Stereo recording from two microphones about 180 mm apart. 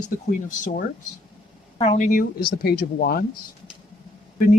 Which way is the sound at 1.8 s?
40° left (ahead or behind).